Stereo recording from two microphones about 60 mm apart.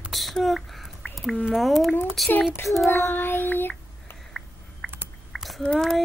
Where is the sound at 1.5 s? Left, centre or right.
Centre.